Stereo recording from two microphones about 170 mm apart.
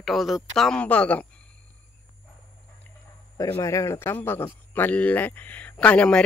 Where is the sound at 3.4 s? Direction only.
20° left (ahead or behind).